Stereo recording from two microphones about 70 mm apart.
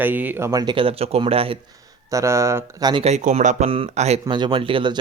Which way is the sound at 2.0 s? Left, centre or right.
Right.